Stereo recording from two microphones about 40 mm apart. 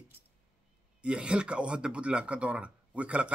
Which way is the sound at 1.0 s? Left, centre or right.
Right.